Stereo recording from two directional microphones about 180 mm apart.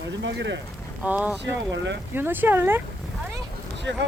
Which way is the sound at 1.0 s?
5° right (ahead or behind).